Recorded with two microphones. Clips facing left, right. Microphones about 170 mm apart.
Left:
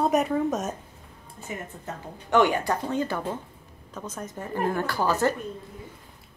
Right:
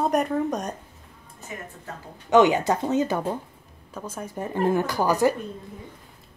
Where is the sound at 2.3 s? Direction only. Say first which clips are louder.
Right 4 dB; 20° right (ahead or behind).